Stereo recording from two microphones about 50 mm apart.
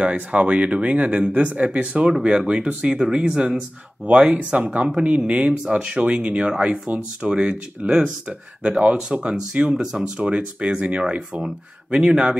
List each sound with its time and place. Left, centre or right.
0.0 s speech: right